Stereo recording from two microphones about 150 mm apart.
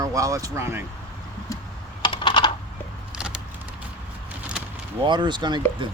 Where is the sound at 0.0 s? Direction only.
20° right (ahead or behind).